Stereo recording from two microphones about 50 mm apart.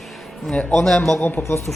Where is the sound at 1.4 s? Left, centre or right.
Left.